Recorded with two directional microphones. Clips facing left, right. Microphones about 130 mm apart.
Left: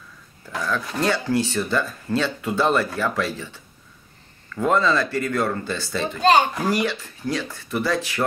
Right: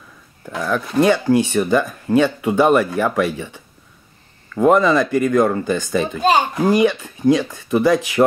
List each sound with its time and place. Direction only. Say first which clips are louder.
0.6 s speech: right 7 dB; 20° right (ahead or behind)